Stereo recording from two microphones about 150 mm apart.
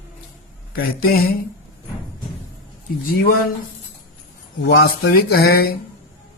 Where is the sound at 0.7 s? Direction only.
90° left.